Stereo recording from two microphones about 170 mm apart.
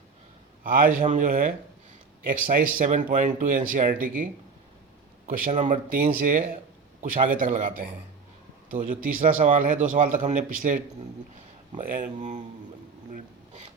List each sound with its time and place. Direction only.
0.6 s speech: 55° right (ahead or behind)
5.4 s a man's voice: 50° right (ahead or behind)
13.1 s a sound: 50° right (ahead or behind)